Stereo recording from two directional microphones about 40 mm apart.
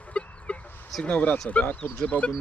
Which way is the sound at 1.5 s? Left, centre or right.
Left.